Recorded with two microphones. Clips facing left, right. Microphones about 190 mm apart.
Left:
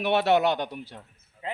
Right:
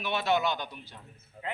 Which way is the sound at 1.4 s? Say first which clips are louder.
Left 2 dB; 35° right (ahead or behind).